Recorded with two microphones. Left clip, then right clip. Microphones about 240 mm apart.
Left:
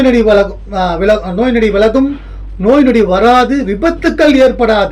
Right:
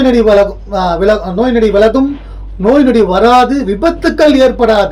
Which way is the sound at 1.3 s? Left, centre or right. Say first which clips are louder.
Right 2 dB; centre.